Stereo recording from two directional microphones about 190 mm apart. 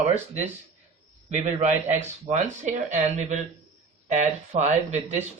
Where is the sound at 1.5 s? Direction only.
40° right (ahead or behind).